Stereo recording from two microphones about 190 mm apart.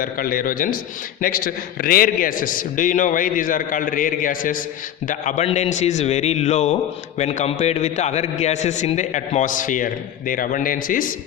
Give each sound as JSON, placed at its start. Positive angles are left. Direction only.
{"t": 0.0, "sound": "a man's voice", "side_deg": 50}